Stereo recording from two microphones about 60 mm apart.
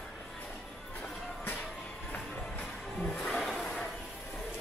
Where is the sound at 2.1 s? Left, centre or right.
Centre.